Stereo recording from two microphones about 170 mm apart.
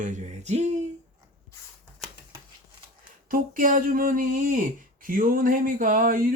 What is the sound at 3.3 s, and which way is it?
Speech, 55° right (ahead or behind).